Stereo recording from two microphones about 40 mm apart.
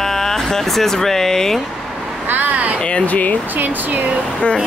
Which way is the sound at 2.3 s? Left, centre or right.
Right.